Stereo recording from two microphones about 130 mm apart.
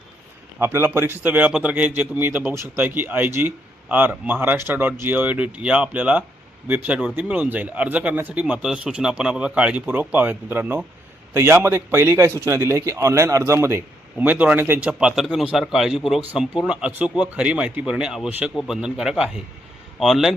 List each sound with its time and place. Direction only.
0.6 s a man's voice: 20° right (ahead or behind); by 20.3 s centre (ahead or behind)